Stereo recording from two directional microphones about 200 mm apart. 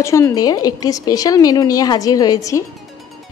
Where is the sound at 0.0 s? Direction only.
15° left (ahead or behind).